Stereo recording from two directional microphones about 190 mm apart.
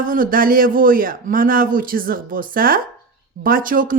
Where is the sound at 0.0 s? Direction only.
45° right (ahead or behind).